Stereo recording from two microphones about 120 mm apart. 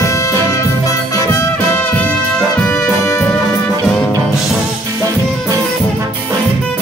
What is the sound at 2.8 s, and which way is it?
Music, 25° left (ahead or behind).